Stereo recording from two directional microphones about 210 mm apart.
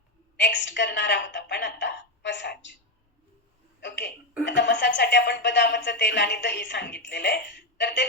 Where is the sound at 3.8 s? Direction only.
55° left (ahead or behind).